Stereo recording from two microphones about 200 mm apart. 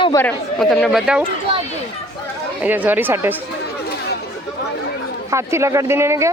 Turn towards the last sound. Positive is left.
turn(degrees=-15)  # may be behind; listen again after turning